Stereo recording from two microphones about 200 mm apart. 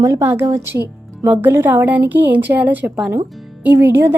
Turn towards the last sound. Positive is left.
turn(degrees=-10)  # may be behind; listen again after turning